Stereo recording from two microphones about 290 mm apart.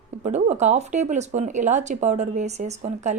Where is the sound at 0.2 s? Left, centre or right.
Right.